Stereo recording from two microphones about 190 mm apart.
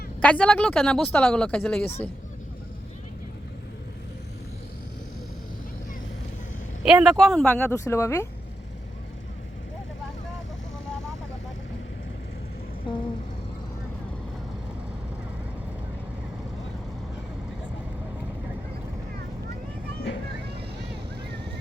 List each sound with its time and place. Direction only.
0.2 s speech: 5° left (ahead or behind)
6.8 s a woman's voice: 5° right (ahead or behind); by 8.3 s 15° left (ahead or behind)
12.9 s a sound: 25° left (ahead or behind)